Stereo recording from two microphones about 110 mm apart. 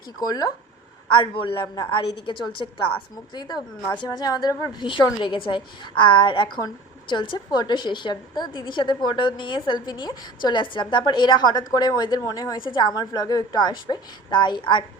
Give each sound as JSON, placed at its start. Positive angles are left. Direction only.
{"t": 0.2, "sound": "a woman's voice", "side_deg": 35}
{"t": 1.2, "sound": "a woman's voice", "side_deg": 50}